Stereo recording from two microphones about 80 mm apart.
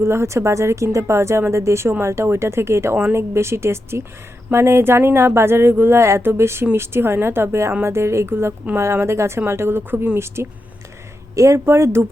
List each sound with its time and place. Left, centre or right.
0.0 s speech: right